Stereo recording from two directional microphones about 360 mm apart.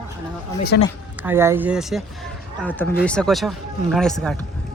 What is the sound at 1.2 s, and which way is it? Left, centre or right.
Speech, centre.